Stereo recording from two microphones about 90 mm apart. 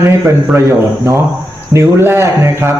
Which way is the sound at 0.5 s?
35° right (ahead or behind).